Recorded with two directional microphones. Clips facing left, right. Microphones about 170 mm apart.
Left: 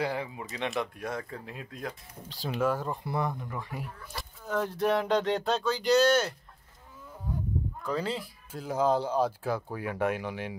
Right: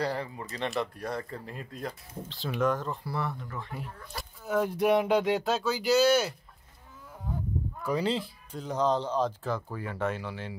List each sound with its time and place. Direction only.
0.0 s speech: 5° left (ahead or behind)
4.1 s a sound: centre (ahead or behind)
4.6 s speech: 10° right (ahead or behind)
7.8 s speech: 15° right (ahead or behind)
8.5 s speech: 5° left (ahead or behind)